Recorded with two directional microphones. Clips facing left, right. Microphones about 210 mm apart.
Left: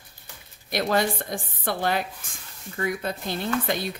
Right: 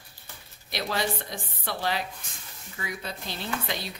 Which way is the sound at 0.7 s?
50° left (ahead or behind).